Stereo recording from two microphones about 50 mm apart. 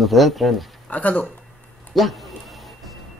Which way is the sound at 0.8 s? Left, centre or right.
Left.